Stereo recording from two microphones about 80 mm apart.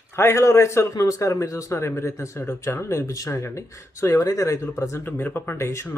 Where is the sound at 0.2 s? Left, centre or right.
Left.